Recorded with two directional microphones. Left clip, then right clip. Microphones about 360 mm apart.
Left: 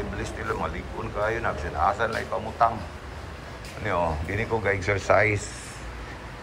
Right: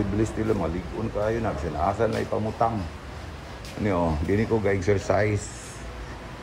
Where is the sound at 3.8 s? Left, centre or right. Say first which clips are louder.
Right 1 dB; centre.